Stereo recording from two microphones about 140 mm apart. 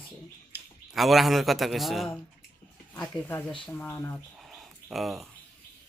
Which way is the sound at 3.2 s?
15° left (ahead or behind).